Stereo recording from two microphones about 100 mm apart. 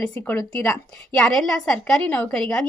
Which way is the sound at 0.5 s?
5° left (ahead or behind).